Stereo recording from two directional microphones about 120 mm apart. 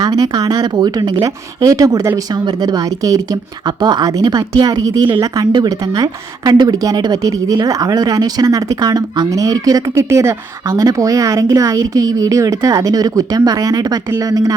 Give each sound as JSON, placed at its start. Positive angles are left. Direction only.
{"t": 0.0, "sound": "a woman's voice", "side_deg": -35}